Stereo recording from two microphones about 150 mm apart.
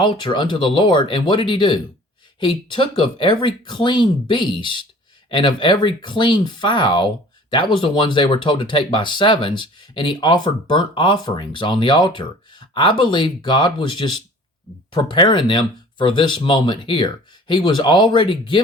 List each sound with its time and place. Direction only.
0.0 s speech: 30° left (ahead or behind)